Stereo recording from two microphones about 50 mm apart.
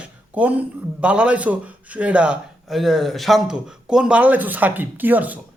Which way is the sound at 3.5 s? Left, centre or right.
Centre.